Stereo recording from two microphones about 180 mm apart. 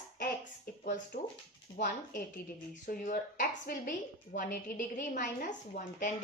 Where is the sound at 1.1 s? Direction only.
50° left (ahead or behind).